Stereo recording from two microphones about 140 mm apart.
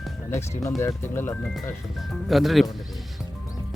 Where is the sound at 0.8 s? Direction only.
20° left (ahead or behind).